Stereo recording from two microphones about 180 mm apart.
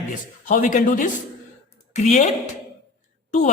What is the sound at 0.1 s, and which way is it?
A woman's voice, 45° left (ahead or behind).